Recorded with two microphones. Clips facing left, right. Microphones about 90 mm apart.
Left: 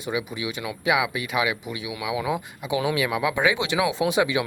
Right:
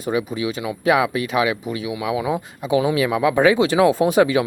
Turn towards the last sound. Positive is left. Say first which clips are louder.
# right 6 dB
turn(degrees=-45)  # may be behind; listen again after turning